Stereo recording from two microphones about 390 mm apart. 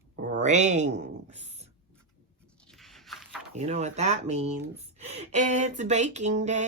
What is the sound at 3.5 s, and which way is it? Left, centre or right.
Speech, centre.